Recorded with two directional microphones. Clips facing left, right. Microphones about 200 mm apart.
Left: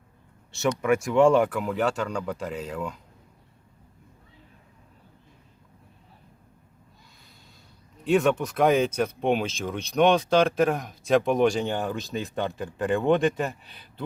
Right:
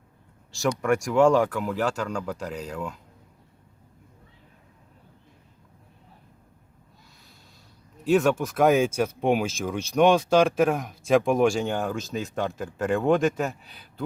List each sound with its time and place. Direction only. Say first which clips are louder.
0.8 s speech: even; centre (ahead or behind)
8.0 s speech: right 1 dB; centre (ahead or behind)